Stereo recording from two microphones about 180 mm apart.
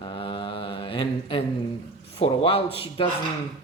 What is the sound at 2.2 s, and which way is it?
Speech, 30° left (ahead or behind).